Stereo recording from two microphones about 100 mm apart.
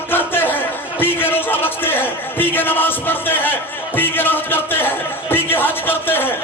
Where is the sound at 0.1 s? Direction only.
20° left (ahead or behind).